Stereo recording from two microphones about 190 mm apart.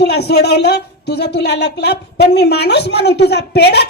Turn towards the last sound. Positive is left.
turn(degrees=60)  # may be behind; listen again after turning